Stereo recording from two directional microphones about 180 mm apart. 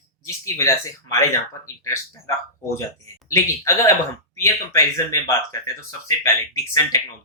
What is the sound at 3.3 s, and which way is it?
Speech, 15° left (ahead or behind).